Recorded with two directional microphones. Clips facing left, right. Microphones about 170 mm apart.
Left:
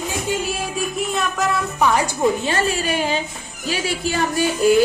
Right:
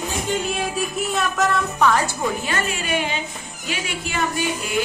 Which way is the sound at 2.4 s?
30° left (ahead or behind).